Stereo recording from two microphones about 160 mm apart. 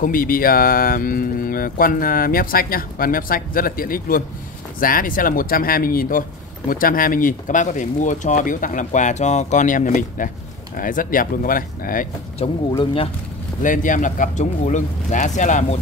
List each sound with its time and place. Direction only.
0.0 s speech: 60° left (ahead or behind)
13.6 s speech: 55° left (ahead or behind)